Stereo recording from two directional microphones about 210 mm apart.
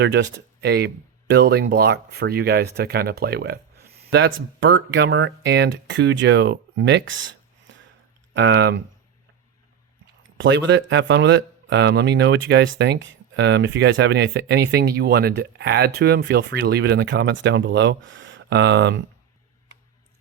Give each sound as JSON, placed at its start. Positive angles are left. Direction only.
{"t": 0.0, "sound": "speech", "side_deg": -55}
{"t": 10.3, "sound": "speech", "side_deg": -60}